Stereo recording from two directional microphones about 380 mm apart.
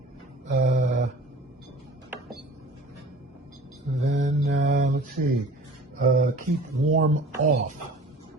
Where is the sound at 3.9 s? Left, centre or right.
Centre.